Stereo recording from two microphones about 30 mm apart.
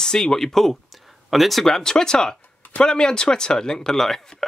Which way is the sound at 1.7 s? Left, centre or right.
Centre.